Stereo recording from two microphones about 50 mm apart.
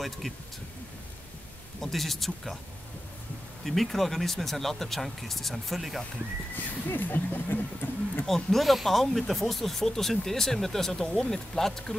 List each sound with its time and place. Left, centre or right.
0.2 s speech: centre
1.8 s speech: centre
3.6 s speech: centre
6.5 s speech: left
8.5 s speech: centre